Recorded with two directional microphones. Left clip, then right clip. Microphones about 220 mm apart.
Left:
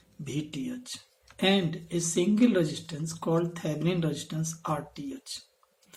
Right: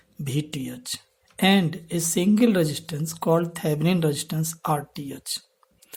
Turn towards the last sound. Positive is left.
turn(degrees=-50)  # may be behind; listen again after turning